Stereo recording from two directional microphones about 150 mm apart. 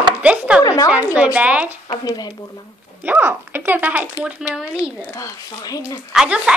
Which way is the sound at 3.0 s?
15° right (ahead or behind).